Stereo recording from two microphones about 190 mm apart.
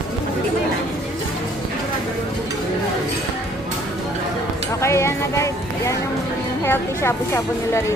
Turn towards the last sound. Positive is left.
turn(degrees=15)  # may be behind; listen again after turning